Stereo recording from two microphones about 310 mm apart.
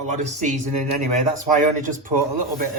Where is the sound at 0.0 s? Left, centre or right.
Right.